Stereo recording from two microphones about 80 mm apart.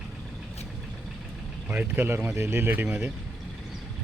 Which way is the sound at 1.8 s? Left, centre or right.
Right.